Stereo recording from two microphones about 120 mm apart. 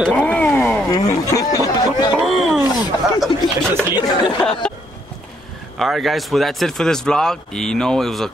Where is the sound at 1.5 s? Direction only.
30° left (ahead or behind).